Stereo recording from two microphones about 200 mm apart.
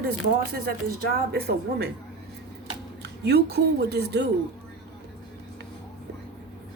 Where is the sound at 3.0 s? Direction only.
55° right (ahead or behind).